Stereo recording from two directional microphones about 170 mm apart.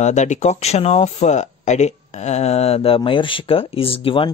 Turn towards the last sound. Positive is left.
turn(degrees=30)  # may be behind; listen again after turning